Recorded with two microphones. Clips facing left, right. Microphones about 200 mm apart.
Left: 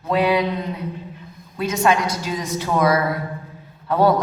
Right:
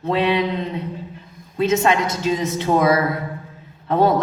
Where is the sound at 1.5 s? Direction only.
25° right (ahead or behind).